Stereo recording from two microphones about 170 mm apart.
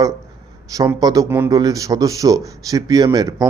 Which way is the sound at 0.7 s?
20° right (ahead or behind).